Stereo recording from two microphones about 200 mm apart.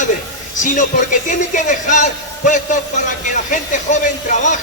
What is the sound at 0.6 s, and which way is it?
A man's voice, 40° left (ahead or behind).